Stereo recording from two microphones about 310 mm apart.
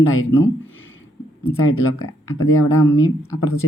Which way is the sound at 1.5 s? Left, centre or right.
Left.